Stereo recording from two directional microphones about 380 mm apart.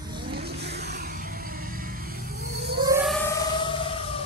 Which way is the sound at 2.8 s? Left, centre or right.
Centre.